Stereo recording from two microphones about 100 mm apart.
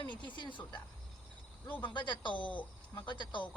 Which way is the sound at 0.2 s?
50° left (ahead or behind).